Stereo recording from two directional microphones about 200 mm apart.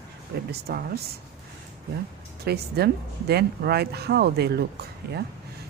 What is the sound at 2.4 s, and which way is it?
Speech, 50° right (ahead or behind).